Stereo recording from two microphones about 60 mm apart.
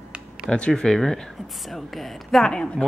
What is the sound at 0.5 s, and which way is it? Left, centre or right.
Speech, centre.